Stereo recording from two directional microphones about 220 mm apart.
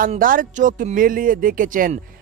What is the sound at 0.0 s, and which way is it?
Speech, 40° right (ahead or behind).